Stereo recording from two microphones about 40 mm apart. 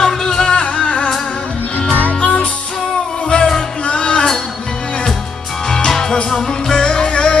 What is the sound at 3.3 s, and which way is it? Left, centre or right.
Music, left.